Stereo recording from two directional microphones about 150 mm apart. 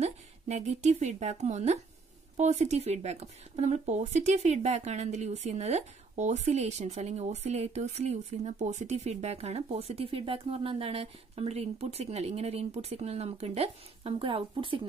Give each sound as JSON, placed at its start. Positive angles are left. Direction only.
{"t": 0.0, "sound": "speech", "side_deg": -45}